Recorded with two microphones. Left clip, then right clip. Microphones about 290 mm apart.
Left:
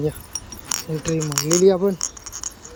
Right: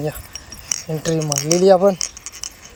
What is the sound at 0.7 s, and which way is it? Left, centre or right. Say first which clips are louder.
Speech: right 3 dB; centre.